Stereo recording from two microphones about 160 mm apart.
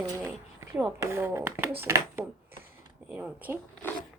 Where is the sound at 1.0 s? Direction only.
15° right (ahead or behind).